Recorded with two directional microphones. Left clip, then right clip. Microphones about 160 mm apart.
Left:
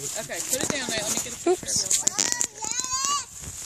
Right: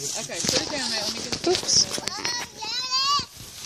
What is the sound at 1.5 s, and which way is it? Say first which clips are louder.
Speech: even; 10° left (ahead or behind).